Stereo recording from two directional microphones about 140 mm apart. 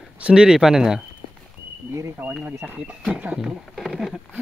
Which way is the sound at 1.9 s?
20° right (ahead or behind).